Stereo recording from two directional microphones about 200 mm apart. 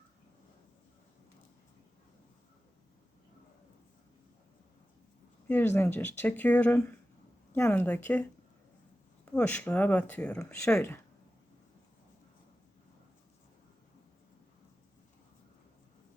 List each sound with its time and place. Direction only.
5.5 s speech: 10° left (ahead or behind)